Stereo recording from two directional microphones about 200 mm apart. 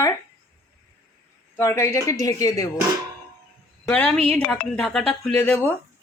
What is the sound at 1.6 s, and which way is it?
Speech, 15° left (ahead or behind).